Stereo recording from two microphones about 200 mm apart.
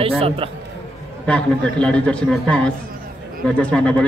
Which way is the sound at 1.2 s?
5° left (ahead or behind).